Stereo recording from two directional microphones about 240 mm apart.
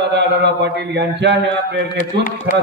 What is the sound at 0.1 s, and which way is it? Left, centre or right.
A man's voice, right.